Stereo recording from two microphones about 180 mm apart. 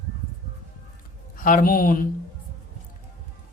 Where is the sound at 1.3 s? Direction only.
50° left (ahead or behind).